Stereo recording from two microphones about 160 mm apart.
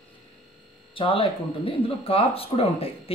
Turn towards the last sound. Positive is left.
turn(degrees=35)  # may be behind; listen again after turning